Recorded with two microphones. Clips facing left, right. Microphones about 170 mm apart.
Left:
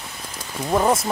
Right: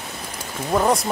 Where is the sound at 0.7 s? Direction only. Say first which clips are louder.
Even; 5° left (ahead or behind).